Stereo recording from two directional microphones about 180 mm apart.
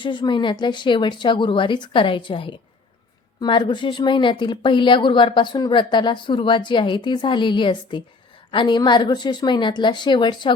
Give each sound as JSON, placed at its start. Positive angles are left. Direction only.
{"t": 0.0, "sound": "speech", "side_deg": 25}